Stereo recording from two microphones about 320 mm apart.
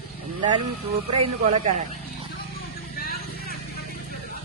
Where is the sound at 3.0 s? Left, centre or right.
Left.